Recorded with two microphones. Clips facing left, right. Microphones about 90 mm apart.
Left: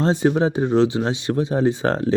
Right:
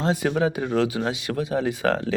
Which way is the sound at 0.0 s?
30° left (ahead or behind).